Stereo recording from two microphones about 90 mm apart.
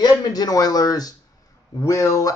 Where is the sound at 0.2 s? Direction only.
45° left (ahead or behind).